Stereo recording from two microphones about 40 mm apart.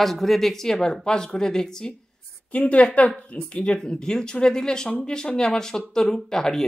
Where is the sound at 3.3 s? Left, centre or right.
Left.